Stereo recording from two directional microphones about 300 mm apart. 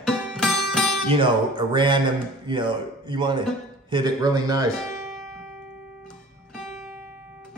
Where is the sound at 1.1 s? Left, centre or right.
Centre.